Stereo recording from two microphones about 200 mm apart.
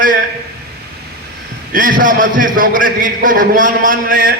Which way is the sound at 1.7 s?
45° right (ahead or behind).